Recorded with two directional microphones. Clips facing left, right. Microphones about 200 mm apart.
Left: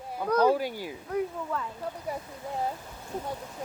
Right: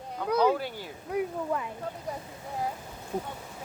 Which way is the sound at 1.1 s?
15° right (ahead or behind).